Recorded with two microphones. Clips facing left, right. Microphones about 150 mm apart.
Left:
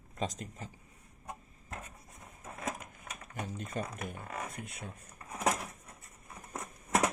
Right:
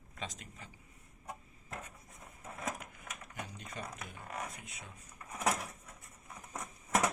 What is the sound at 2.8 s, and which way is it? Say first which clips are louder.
Speech: left 1 dB; 45° left (ahead or behind).